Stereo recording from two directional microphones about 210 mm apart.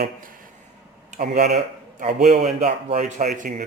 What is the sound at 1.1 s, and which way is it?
Speech, 45° right (ahead or behind).